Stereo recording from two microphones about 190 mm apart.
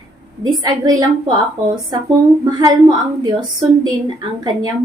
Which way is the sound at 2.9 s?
20° right (ahead or behind).